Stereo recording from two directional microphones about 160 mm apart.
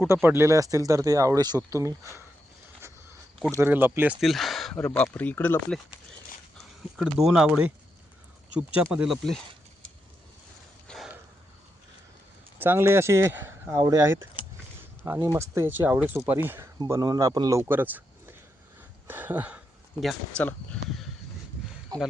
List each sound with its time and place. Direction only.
0.0 s speech: 15° right (ahead or behind)
3.6 s speech: 15° right (ahead or behind)
4.2 s speech: centre (ahead or behind)
7.0 s speech: 5° right (ahead or behind)
10.8 s a sound: centre (ahead or behind)
12.5 s speech: 15° right (ahead or behind); by 21.0 s 5° left (ahead or behind)
21.9 s speech: 25° right (ahead or behind)